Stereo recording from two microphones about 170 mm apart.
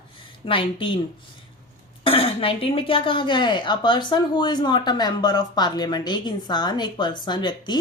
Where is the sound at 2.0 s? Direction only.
35° left (ahead or behind).